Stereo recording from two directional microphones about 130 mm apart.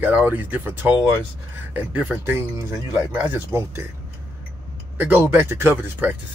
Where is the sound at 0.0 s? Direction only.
15° right (ahead or behind).